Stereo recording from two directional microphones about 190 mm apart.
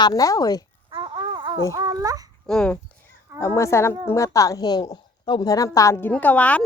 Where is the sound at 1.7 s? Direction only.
20° right (ahead or behind).